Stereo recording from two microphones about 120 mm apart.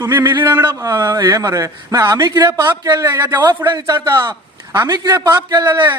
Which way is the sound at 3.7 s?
35° right (ahead or behind).